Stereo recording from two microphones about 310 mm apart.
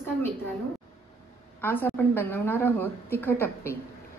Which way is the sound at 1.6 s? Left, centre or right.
Centre.